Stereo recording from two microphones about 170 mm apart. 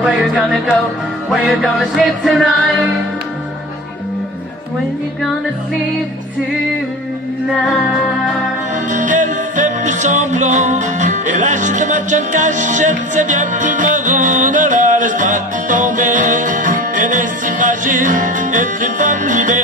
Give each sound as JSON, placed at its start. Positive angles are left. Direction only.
{"t": 0.0, "sound": "music", "side_deg": 0}
{"t": 7.4, "sound": "music", "side_deg": 0}
{"t": 8.9, "sound": "music", "side_deg": -50}